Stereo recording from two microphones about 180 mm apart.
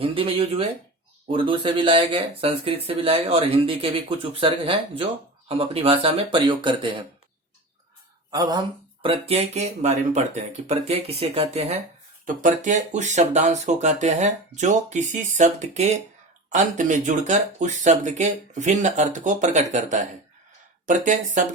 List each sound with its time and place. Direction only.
0.0 s speech: 30° right (ahead or behind)
8.3 s speech: 20° right (ahead or behind)
9.0 s speech: 30° right (ahead or behind)